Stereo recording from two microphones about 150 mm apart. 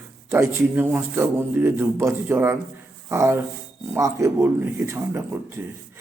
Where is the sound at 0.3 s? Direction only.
15° right (ahead or behind).